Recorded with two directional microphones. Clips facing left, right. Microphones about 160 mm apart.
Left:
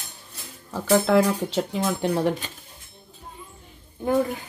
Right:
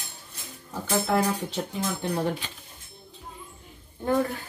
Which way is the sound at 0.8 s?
90° left.